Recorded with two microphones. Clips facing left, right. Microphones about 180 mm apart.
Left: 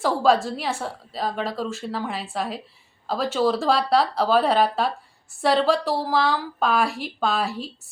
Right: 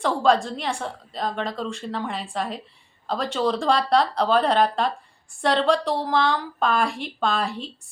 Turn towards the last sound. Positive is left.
turn(degrees=5)  # may be behind; listen again after turning